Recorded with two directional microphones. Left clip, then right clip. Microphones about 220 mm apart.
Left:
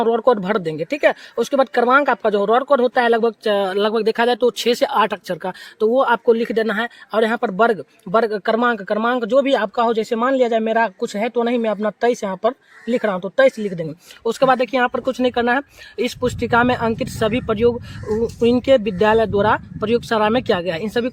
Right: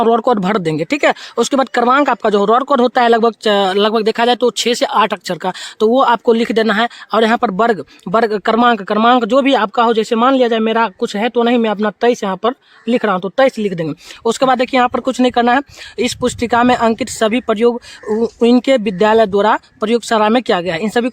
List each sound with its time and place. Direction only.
0.0 s speech: 35° right (ahead or behind)